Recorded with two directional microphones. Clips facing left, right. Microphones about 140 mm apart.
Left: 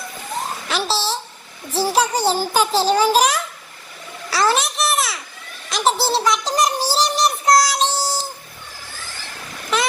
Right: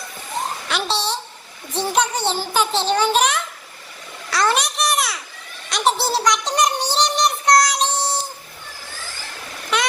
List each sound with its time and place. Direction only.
0.7 s a child's voice: centre (ahead or behind)
2.1 s a child's voice: 40° left (ahead or behind)
4.3 s babbling: 5° left (ahead or behind)
5.6 s a sound: centre (ahead or behind)